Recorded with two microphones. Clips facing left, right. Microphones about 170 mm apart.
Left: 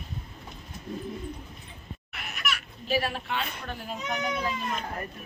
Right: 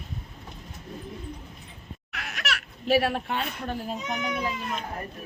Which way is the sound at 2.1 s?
90° right.